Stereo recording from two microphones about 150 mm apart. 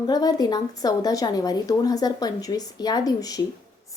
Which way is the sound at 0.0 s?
25° left (ahead or behind).